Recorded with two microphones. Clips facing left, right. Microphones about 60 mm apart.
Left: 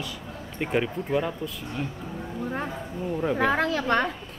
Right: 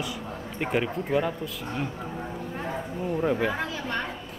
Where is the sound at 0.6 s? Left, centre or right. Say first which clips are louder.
Left 1 dB; centre.